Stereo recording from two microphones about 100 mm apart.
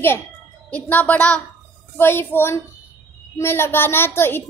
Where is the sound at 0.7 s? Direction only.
15° left (ahead or behind).